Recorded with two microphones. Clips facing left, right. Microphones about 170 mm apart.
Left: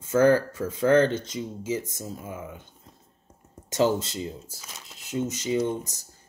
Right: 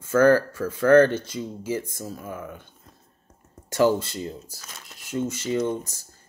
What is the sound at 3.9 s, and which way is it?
Speech, 20° left (ahead or behind).